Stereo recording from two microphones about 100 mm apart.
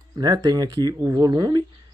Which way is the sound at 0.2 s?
40° right (ahead or behind).